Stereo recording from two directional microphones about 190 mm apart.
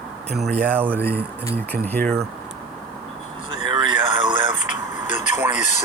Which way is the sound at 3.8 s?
25° right (ahead or behind).